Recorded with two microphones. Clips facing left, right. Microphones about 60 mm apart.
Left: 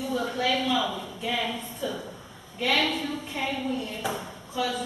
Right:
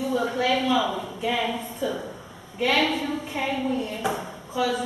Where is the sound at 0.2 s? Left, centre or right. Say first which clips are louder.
Right 1 dB; centre.